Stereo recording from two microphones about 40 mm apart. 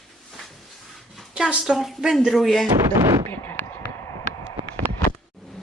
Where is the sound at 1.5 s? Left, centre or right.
Right.